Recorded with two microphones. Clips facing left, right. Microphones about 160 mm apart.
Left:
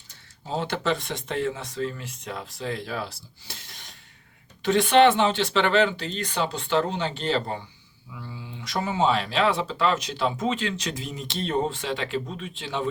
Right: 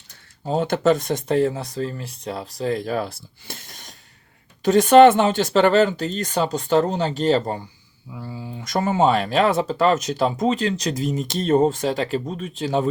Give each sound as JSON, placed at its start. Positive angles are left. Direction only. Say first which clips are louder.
{"t": 0.4, "sound": "speech", "louder": "right 8 dB", "side_deg": -45}